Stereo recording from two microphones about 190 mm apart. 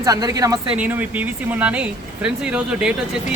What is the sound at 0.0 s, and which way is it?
A woman's voice, 20° right (ahead or behind).